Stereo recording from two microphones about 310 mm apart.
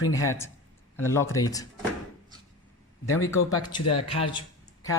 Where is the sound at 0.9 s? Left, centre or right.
Centre.